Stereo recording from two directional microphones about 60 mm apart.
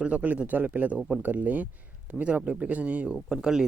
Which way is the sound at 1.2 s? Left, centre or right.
Right.